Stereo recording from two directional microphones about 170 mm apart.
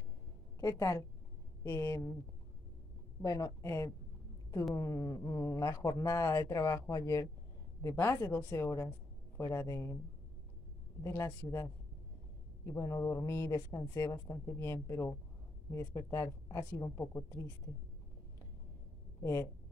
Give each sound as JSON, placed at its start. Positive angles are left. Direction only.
{"t": 0.6, "sound": "a woman's voice", "side_deg": 20}
{"t": 3.2, "sound": "speech", "side_deg": 20}
{"t": 11.0, "sound": "speech", "side_deg": 15}
{"t": 19.2, "sound": "speech", "side_deg": 15}